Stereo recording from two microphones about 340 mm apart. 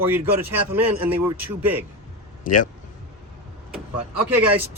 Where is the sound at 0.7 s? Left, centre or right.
Right.